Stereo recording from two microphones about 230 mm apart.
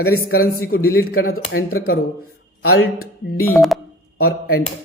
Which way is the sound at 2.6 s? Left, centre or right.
Left.